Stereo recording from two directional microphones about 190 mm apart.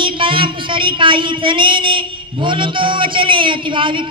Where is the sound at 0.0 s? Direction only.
25° right (ahead or behind).